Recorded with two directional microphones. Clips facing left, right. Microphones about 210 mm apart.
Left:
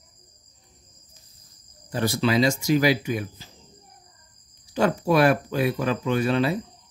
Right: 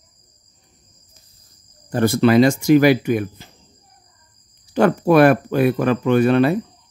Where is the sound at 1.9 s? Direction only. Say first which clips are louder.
Right 8 dB; 55° right (ahead or behind).